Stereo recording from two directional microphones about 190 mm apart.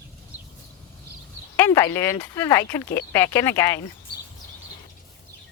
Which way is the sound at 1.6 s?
15° left (ahead or behind).